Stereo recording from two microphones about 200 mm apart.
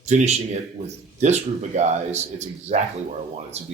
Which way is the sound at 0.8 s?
35° right (ahead or behind).